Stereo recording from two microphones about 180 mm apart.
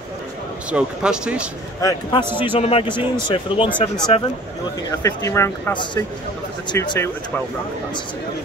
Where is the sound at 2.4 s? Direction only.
30° left (ahead or behind).